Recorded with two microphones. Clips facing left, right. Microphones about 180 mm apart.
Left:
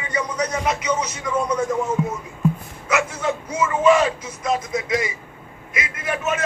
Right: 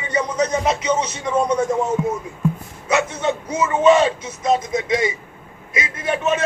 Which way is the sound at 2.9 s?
25° right (ahead or behind).